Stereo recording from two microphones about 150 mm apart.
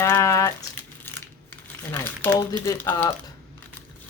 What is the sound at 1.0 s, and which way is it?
Crumpling, 15° left (ahead or behind).